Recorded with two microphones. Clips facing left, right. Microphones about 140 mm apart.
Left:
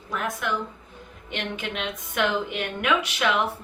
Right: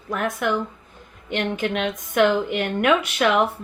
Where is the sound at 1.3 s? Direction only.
45° right (ahead or behind).